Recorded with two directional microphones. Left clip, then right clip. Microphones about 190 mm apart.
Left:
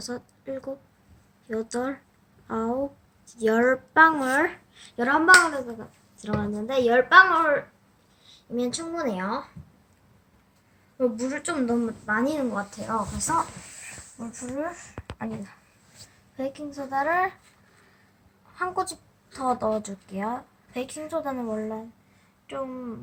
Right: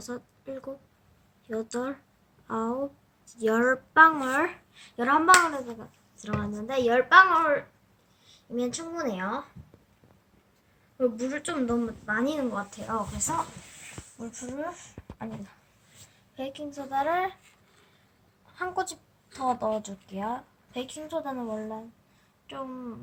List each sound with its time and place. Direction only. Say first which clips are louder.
0.0 s a woman's voice: left 3 dB; centre (ahead or behind)
10.9 s speech: left 2 dB; centre (ahead or behind)
12.9 s a woman's voice: left 5 dB; 15° right (ahead or behind)
16.4 s a woman's voice: left 4 dB; 25° right (ahead or behind)
17.0 s a woman's voice: left 3 dB; 10° right (ahead or behind)
18.5 s a woman's voice: left 3 dB; 10° right (ahead or behind)